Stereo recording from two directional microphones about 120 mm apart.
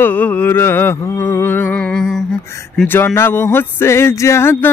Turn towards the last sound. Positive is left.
turn(degrees=20)  # may be behind; listen again after turning